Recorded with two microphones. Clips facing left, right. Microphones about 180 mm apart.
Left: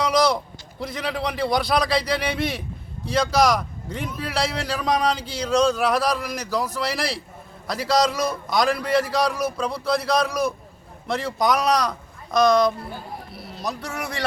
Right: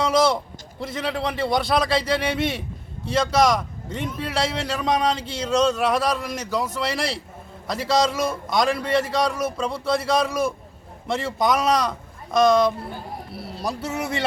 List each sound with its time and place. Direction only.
0.0 s a sound: centre (ahead or behind)
0.8 s a man's voice: centre (ahead or behind)
13.6 s speech: 25° right (ahead or behind)